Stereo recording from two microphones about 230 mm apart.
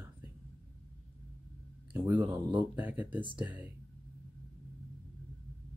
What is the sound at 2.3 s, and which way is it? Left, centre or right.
Speech, right.